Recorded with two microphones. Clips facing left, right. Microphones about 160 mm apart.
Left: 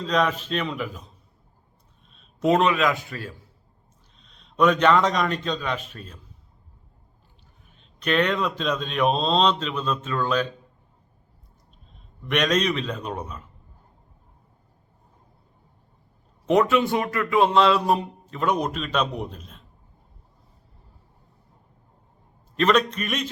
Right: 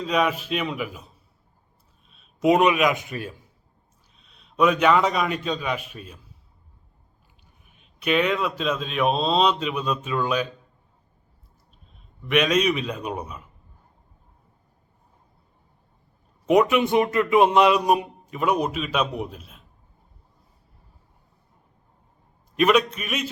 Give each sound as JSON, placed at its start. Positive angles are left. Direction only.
{"t": 0.0, "sound": "a man's voice", "side_deg": -10}
{"t": 4.2, "sound": "a man's voice", "side_deg": -5}
{"t": 7.8, "sound": "speech", "side_deg": -10}
{"t": 12.2, "sound": "speech", "side_deg": -5}
{"t": 16.5, "sound": "speech", "side_deg": -15}
{"t": 22.5, "sound": "speech", "side_deg": -10}